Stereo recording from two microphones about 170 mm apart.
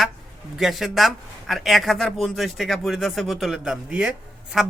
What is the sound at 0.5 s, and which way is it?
Speech, centre (ahead or behind).